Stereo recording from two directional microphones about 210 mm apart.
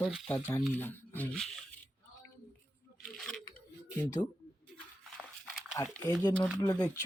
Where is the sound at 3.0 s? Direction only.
5° left (ahead or behind).